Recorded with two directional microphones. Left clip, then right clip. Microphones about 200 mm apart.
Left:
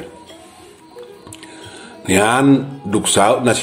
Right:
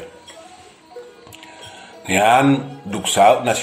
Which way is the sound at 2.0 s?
35° left (ahead or behind).